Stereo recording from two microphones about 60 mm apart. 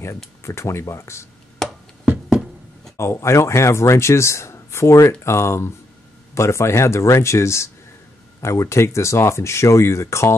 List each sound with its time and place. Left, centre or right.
0.4 s speech: left
1.6 s a sound: centre
3.0 s speech: left